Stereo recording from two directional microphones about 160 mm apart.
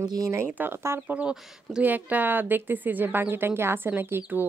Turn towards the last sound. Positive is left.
turn(degrees=-10)  # may be behind; listen again after turning